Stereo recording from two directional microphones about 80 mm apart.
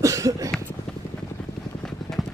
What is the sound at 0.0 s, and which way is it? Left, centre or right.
Cough, right.